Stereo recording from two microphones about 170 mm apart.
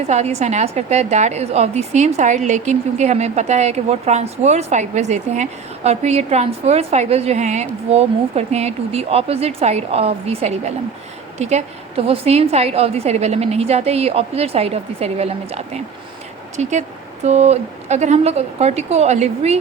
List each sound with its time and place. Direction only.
0.1 s a woman's voice: 40° right (ahead or behind)